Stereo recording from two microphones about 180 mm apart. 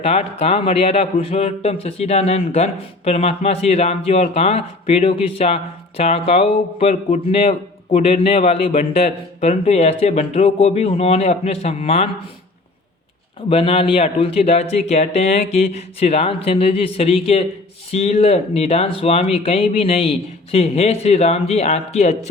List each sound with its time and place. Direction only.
0.0 s speech: 35° left (ahead or behind)
13.5 s speech: 30° left (ahead or behind)